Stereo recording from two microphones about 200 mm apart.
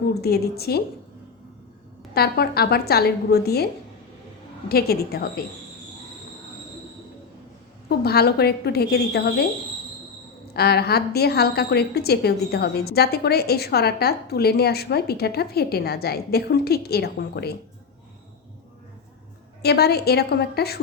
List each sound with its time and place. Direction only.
0.1 s a woman's voice: 50° left (ahead or behind)
2.1 s a woman's voice: 50° left (ahead or behind)
4.7 s a woman's voice: 50° left (ahead or behind)
7.9 s a woman's voice: 50° left (ahead or behind)
10.5 s a woman's voice: 50° left (ahead or behind)
19.6 s a woman's voice: 55° left (ahead or behind)